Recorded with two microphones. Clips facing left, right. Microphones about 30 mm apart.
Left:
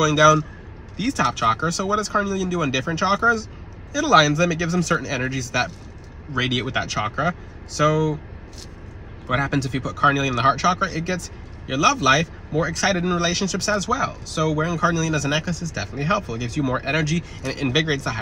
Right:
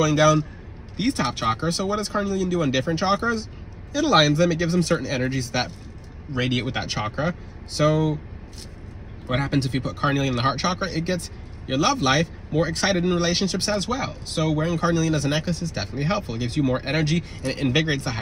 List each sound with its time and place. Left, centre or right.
0.0 s speech: right
1.4 s speech: centre
9.3 s speech: right
16.6 s speech: centre
17.0 s speech: right
17.5 s speech: right